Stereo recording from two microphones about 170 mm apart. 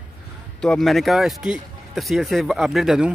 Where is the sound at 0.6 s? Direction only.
5° left (ahead or behind).